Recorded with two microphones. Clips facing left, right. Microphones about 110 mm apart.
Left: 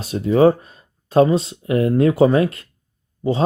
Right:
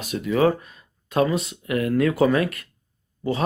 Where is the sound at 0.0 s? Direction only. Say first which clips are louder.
Left 6 dB; 30° left (ahead or behind).